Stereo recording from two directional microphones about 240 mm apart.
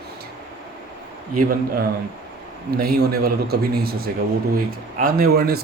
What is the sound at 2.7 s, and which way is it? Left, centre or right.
Speech, right.